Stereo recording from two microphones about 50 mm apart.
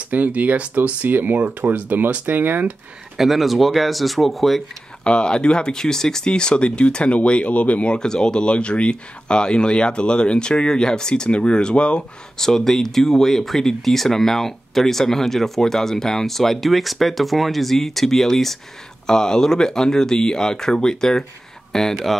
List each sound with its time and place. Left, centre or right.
0.1 s speech: right
3.2 s speech: centre
5.0 s speech: centre
7.9 s speech: centre
12.4 s speech: centre